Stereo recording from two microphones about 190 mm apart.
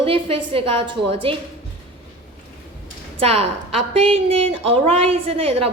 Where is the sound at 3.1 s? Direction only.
30° right (ahead or behind).